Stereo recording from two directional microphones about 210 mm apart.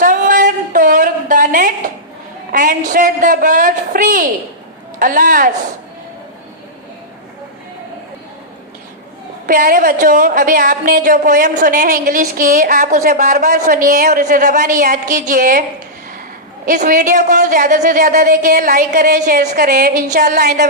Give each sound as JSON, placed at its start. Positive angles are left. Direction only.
{"t": 0.0, "sound": "a sound", "side_deg": -40}
{"t": 2.5, "sound": "a woman's voice", "side_deg": -40}
{"t": 9.5, "sound": "a woman's voice", "side_deg": -40}
{"t": 16.6, "sound": "a woman's voice", "side_deg": -40}